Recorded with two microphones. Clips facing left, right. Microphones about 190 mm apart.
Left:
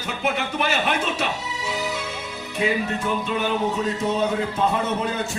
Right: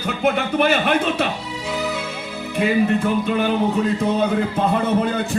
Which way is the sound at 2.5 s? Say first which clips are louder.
Right 6 dB; 60° right (ahead or behind).